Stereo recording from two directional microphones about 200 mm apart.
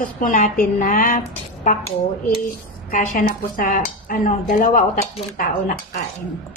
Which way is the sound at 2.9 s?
40° left (ahead or behind).